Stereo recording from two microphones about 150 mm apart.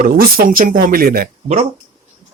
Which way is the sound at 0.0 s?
75° right (ahead or behind).